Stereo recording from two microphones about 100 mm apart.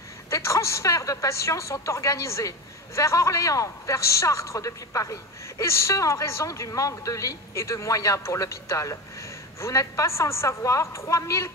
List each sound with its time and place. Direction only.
0.3 s a woman's voice: 30° left (ahead or behind)